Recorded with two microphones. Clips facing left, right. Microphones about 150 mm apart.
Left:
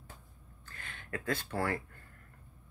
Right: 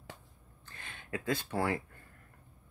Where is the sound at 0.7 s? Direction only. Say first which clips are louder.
Right 2 dB; 20° right (ahead or behind).